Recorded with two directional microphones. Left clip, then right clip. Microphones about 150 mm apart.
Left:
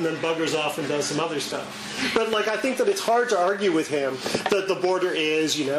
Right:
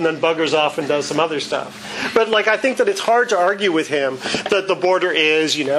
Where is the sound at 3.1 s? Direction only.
25° right (ahead or behind).